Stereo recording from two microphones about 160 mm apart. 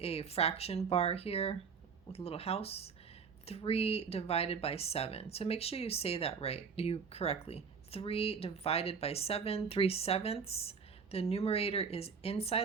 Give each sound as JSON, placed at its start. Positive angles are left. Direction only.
{"t": 0.0, "sound": "speech", "side_deg": 40}